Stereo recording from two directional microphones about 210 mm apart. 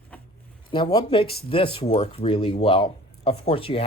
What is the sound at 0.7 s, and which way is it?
A man's voice, 20° left (ahead or behind).